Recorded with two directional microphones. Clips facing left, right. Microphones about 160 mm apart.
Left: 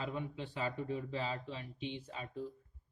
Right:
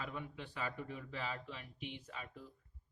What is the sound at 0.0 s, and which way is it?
Speech, 30° left (ahead or behind).